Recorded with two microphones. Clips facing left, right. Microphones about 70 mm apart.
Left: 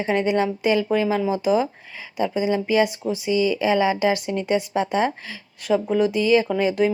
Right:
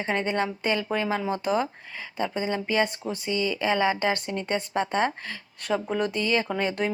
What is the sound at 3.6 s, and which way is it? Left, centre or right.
Speech, centre.